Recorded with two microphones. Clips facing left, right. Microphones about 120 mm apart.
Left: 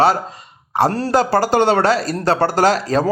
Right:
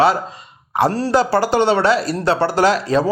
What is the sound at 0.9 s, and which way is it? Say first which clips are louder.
Speech: even; 45° left (ahead or behind).